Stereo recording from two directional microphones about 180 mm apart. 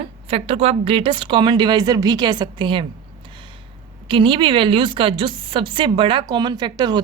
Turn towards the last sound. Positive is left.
turn(degrees=-25)  # may be behind; listen again after turning